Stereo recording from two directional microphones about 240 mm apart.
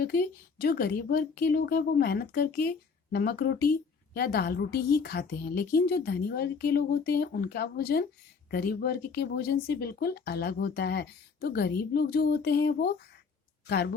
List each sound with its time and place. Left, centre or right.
0.0 s speech: left